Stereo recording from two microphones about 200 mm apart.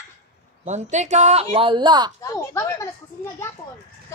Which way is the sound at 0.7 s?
35° right (ahead or behind).